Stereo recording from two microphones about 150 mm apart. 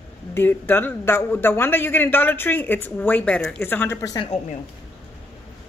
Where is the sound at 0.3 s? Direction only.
15° left (ahead or behind).